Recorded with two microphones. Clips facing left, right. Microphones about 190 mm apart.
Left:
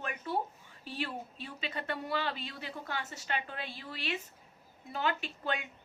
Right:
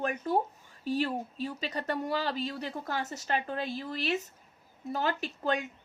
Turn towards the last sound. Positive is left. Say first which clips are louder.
# right 6 dB
turn(degrees=-40)  # may be behind; listen again after turning